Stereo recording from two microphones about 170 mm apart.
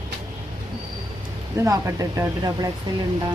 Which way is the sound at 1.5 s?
15° right (ahead or behind).